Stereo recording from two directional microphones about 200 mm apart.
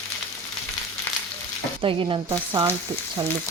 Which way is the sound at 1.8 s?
20° right (ahead or behind).